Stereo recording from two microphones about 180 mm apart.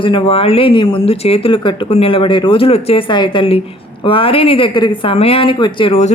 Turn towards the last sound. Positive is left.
turn(degrees=35)  # may be behind; listen again after turning